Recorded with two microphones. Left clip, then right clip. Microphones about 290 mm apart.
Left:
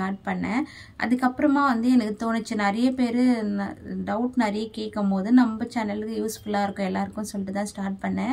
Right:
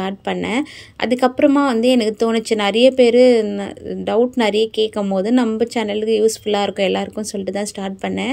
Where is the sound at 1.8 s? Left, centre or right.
Centre.